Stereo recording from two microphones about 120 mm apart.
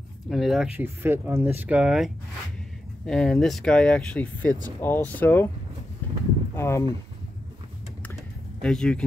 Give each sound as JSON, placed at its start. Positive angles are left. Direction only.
{"t": 0.3, "sound": "speech", "side_deg": 0}
{"t": 0.7, "sound": "speech", "side_deg": -20}
{"t": 1.8, "sound": "speech", "side_deg": -5}
{"t": 6.5, "sound": "speech", "side_deg": 20}
{"t": 8.6, "sound": "speech", "side_deg": 5}